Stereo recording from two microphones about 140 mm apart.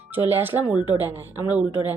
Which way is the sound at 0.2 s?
15° right (ahead or behind).